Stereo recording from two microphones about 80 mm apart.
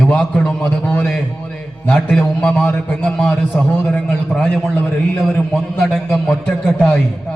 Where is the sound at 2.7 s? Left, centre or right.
Left.